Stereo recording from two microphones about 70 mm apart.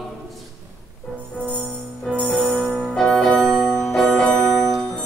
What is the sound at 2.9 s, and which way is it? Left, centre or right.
Music, centre.